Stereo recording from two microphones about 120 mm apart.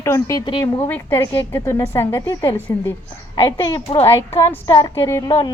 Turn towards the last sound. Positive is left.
turn(degrees=30)  # may be behind; listen again after turning